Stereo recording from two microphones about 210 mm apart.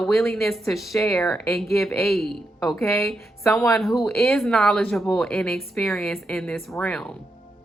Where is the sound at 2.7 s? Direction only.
10° left (ahead or behind).